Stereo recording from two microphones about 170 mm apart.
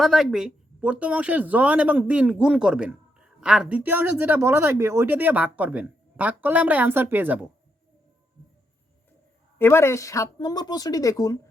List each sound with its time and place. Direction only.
0.0 s speech: centre (ahead or behind)
9.6 s speech: 15° left (ahead or behind)